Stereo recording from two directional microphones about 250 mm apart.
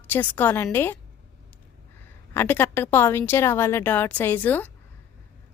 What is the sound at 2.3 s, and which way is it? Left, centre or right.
A woman's voice, centre.